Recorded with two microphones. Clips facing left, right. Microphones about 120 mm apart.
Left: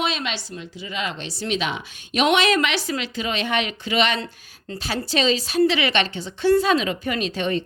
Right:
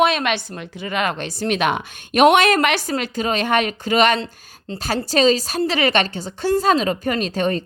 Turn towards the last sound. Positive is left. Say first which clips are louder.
# right 3 dB
turn(degrees=-40)  # may be behind; listen again after turning